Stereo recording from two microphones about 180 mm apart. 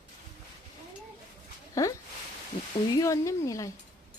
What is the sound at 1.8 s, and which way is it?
Speech, 20° left (ahead or behind).